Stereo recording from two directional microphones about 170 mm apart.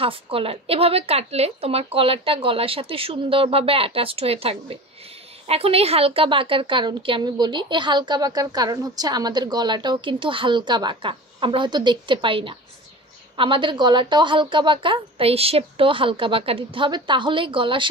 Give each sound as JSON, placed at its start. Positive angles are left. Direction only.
{"t": 0.0, "sound": "a woman's voice", "side_deg": -35}